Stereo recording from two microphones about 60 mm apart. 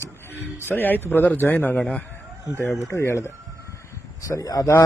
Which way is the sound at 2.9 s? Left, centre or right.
Left.